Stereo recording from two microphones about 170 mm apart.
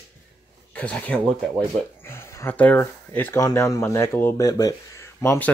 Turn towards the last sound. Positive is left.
turn(degrees=15)  # may be behind; listen again after turning